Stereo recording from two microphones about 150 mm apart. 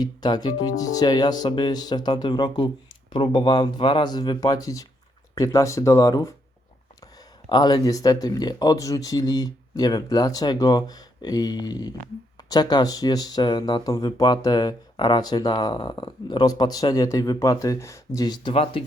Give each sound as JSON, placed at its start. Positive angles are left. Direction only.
{"t": 0.0, "sound": "speech", "side_deg": 30}
{"t": 7.5, "sound": "speech", "side_deg": 30}